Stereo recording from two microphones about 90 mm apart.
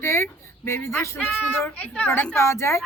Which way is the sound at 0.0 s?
30° left (ahead or behind).